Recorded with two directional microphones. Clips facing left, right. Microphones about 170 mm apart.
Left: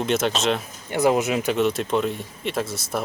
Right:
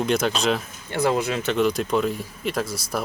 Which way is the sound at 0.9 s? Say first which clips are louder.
Left 2 dB; 20° left (ahead or behind).